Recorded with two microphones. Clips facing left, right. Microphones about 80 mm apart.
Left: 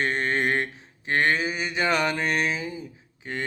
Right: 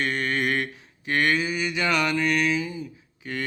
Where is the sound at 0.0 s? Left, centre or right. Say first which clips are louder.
Left 1 dB; left.